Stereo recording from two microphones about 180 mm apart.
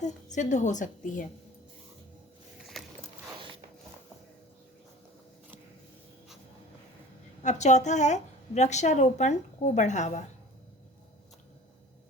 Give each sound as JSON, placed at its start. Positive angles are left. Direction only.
{"t": 0.0, "sound": "a woman's voice", "side_deg": 40}
{"t": 2.8, "sound": "a sound", "side_deg": 0}
{"t": 7.4, "sound": "a woman's voice", "side_deg": 40}